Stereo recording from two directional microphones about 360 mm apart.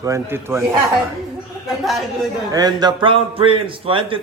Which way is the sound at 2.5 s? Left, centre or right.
Centre.